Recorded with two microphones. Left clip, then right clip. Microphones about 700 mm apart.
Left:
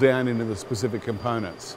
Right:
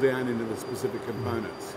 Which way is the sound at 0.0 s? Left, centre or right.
Left.